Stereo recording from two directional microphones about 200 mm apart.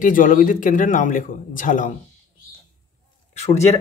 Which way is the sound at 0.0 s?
40° left (ahead or behind).